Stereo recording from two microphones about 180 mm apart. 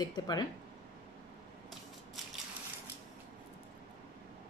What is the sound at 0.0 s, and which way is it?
Speech, 25° left (ahead or behind).